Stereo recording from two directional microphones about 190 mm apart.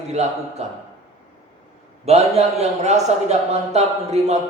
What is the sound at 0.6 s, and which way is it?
Speech, 35° right (ahead or behind).